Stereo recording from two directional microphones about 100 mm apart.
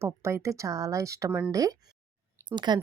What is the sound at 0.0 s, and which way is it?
A woman's voice, 30° right (ahead or behind).